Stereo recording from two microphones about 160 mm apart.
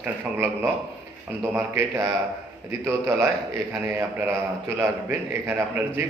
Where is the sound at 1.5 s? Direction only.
15° right (ahead or behind).